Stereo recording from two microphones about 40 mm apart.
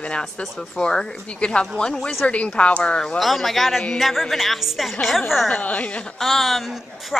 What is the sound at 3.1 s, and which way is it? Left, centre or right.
A woman's voice, centre.